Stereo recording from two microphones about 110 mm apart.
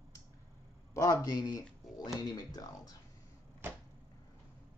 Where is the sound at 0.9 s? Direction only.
35° left (ahead or behind).